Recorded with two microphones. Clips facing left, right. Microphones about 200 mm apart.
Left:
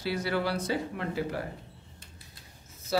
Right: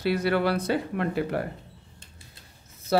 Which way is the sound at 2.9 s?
60° right (ahead or behind).